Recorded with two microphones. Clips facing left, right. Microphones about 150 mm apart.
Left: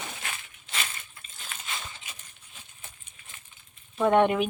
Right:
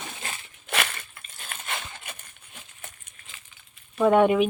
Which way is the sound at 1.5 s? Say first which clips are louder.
Right 4 dB; 60° right (ahead or behind).